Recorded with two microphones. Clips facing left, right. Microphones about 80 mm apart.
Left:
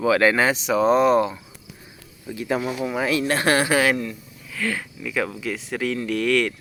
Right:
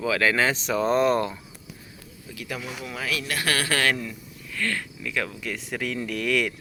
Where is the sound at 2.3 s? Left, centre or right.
Left.